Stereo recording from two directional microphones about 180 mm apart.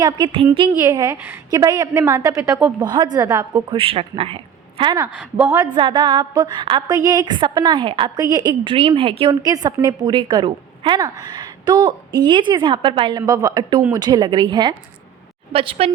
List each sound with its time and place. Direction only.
0.0 s a woman's voice: 25° right (ahead or behind)
2.8 s a woman's voice: 25° right (ahead or behind)
3.7 s a woman's voice: 30° right (ahead or behind)
5.1 s a woman's voice: 5° right (ahead or behind)
5.7 s a woman's voice: 25° right (ahead or behind)
9.3 s a woman's voice: 20° right (ahead or behind)